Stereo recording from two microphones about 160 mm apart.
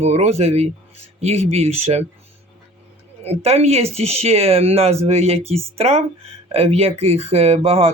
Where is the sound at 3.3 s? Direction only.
40° right (ahead or behind).